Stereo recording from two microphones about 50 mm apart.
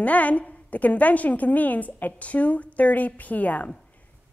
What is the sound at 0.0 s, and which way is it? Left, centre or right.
A woman's voice, left.